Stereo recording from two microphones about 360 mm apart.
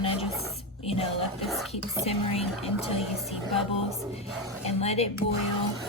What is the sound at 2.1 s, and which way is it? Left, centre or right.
Speech, centre.